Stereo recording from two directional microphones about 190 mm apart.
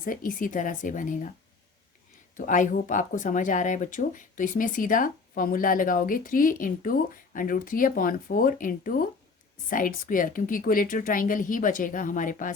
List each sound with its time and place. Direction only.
0.0 s speech: 45° left (ahead or behind)
2.5 s speech: 45° left (ahead or behind)